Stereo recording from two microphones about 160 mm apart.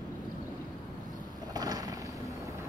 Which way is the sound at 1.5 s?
25° right (ahead or behind).